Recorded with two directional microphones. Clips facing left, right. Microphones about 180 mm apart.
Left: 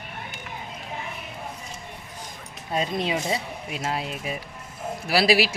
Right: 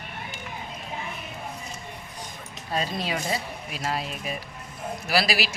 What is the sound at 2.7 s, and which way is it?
Speech, 20° left (ahead or behind).